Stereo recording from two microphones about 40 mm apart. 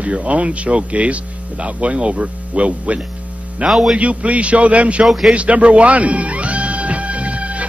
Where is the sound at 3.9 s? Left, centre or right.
Right.